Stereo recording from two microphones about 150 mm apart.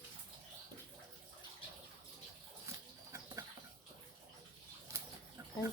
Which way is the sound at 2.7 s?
20° right (ahead or behind).